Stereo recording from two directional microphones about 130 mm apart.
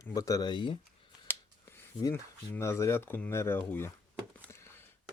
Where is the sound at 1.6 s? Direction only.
20° left (ahead or behind).